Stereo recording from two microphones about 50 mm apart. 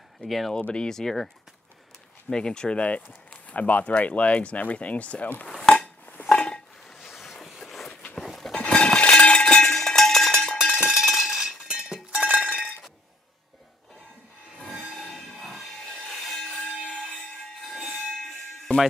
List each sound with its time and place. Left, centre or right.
0.2 s speech: centre
0.6 s speech: centre
5.5 s cutlery: centre
6.2 s a sound: centre
7.0 s vehicle: centre
8.2 s a sound: centre
8.6 s a sound: centre
9.8 s cowbell: centre
10.9 s cowbell: centre
12.1 s cowbell: right
14.9 s train: centre
16.4 s a sound: centre
17.6 s hiss: centre
18.7 s music: left